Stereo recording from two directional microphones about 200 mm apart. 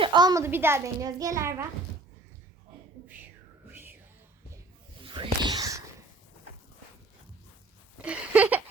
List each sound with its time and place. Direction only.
0.0 s a woman's voice: 20° right (ahead or behind)
3.7 s music: 10° right (ahead or behind)
5.0 s whispering: 25° right (ahead or behind)
8.0 s a sound: 5° right (ahead or behind)